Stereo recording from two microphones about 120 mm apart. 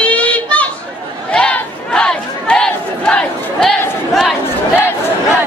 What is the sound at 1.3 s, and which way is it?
Crowd, 10° left (ahead or behind).